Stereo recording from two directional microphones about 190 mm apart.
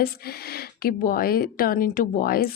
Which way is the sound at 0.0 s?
55° left (ahead or behind).